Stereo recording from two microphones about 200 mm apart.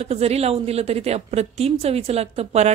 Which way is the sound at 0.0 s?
30° right (ahead or behind).